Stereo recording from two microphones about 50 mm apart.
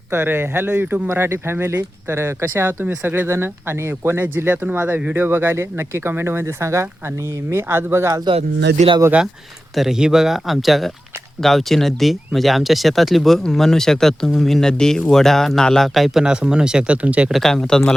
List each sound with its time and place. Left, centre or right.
0.1 s speech: right
3.2 s speech: right
4.4 s speech: right
7.5 s speech: right
9.7 s speech: centre
16.0 s speech: centre
16.2 s speech: centre
17.4 s speech: centre